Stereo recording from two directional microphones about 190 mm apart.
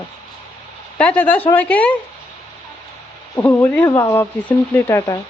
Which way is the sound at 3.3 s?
10° left (ahead or behind).